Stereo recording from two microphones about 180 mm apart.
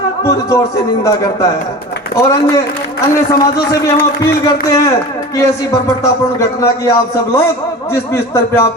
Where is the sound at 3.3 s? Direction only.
15° left (ahead or behind).